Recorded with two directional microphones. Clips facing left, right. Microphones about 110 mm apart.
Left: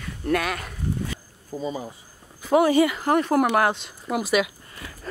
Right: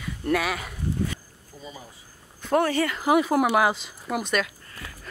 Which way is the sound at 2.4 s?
10° left (ahead or behind).